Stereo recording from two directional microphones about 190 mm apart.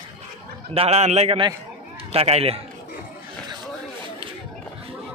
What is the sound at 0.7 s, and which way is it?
A man's voice, 35° right (ahead or behind).